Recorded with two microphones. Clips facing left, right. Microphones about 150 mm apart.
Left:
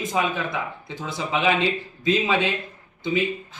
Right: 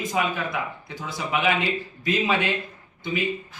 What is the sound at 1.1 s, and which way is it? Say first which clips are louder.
A man's voice: left 2 dB; 25° left (ahead or behind).